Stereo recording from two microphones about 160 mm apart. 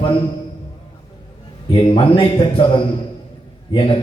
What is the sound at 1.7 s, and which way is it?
A man's voice, 30° left (ahead or behind).